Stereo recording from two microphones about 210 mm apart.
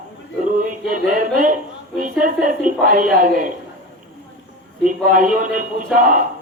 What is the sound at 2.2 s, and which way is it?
Speech, 40° right (ahead or behind).